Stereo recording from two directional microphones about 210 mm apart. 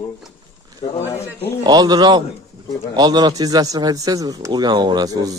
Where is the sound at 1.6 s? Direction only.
20° right (ahead or behind).